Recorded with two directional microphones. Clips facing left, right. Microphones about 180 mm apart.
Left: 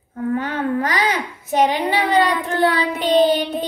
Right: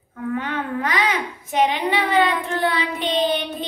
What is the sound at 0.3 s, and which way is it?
A child's voice, 40° left (ahead or behind).